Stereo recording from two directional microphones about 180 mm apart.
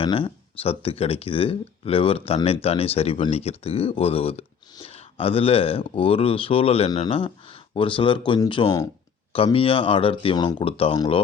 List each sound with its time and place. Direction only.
0.0 s speech: 30° left (ahead or behind)